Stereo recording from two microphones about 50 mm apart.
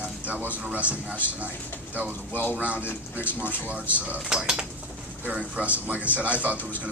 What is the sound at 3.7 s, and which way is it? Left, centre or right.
Speech, right.